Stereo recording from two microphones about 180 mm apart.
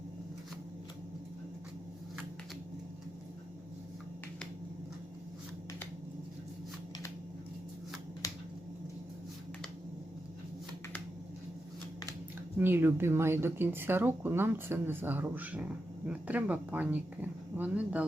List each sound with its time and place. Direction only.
8.2 s finger snapping: 20° left (ahead or behind)
12.5 s speech: 10° right (ahead or behind)